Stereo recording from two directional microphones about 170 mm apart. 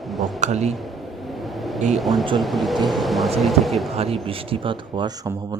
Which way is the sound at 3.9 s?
35° right (ahead or behind).